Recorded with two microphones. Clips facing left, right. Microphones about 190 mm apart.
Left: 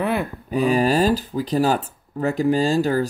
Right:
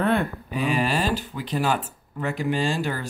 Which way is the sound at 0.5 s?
40° left (ahead or behind).